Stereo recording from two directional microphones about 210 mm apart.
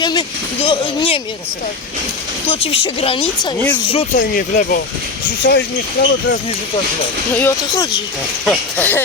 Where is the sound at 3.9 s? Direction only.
30° left (ahead or behind).